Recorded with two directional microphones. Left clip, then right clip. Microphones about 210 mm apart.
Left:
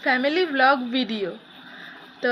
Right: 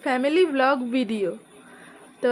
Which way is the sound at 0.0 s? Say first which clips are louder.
Even; 45° right (ahead or behind).